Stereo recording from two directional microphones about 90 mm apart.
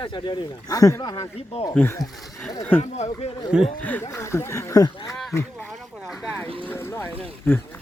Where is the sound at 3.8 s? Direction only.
20° left (ahead or behind).